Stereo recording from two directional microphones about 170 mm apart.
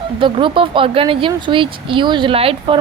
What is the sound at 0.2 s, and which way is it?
Speech, 30° right (ahead or behind).